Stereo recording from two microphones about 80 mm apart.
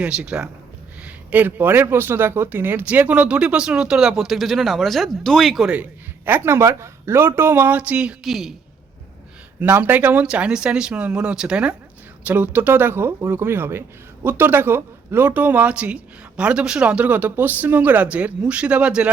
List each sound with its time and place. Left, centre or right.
0.0 s speech: centre
1.0 s speech: right; by 5.7 s centre
5.7 s a man's voice: right
7.8 s speech: centre
8.2 s a woman's voice: centre
9.6 s speech: right
12.2 s speech: right